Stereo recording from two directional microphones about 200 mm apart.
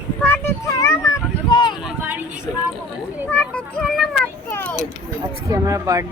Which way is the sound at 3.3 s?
5° left (ahead or behind).